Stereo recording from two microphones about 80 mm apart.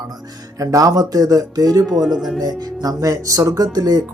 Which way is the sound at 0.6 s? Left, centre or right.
Right.